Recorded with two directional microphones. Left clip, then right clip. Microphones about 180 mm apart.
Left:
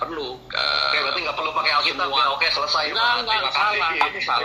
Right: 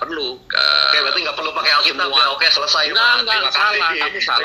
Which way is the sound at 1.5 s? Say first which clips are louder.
Right 6 dB; 35° right (ahead or behind).